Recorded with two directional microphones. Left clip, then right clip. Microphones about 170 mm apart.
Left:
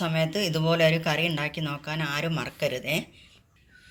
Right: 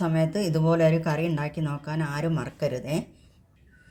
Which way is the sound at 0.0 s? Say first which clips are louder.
Even; 45° right (ahead or behind).